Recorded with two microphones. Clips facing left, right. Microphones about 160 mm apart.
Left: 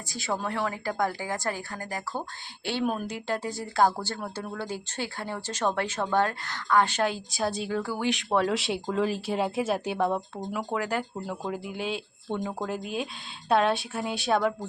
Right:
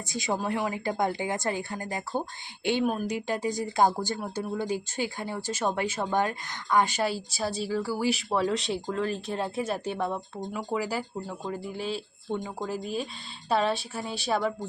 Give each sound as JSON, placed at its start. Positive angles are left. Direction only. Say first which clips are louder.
{"t": 0.1, "sound": "a woman's voice", "louder": "right 2 dB", "side_deg": -15}
{"t": 2.8, "sound": "speech", "louder": "right 1 dB", "side_deg": -10}